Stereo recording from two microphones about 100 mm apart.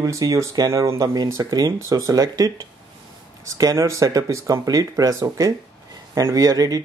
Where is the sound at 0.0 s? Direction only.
35° right (ahead or behind).